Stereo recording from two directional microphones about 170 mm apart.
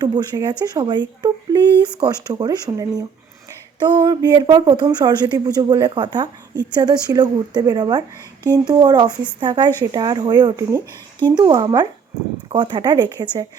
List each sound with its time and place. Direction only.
0.0 s speech: 25° right (ahead or behind)